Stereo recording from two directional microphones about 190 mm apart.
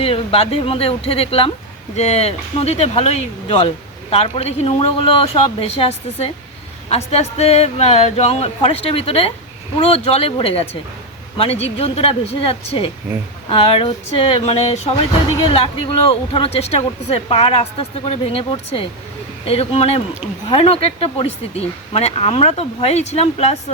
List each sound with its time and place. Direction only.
0.0 s speech: 30° left (ahead or behind)